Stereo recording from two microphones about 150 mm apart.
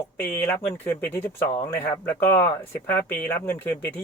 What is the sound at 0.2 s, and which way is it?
Speech, 15° left (ahead or behind).